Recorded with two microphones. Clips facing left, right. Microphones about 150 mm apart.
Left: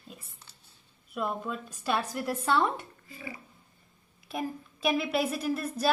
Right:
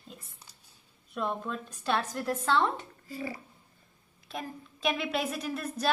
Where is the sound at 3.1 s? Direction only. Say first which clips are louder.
Right 6 dB; 40° right (ahead or behind).